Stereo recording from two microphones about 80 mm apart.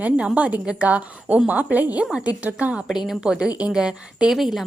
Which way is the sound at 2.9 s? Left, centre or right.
Centre.